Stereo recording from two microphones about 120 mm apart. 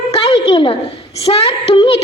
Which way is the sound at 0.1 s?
45° left (ahead or behind).